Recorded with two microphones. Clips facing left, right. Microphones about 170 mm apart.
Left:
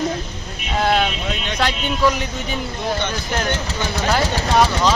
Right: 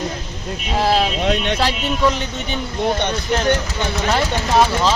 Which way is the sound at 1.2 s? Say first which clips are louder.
Right 7 dB; 65° right (ahead or behind).